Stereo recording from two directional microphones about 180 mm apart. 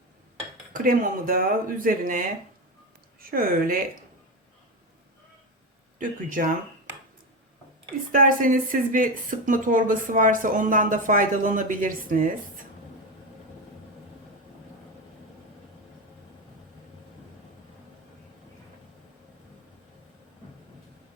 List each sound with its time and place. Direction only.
0.7 s a woman's voice: 50° right (ahead or behind)
6.0 s speech: 50° right (ahead or behind)
8.1 s speech: 50° right (ahead or behind)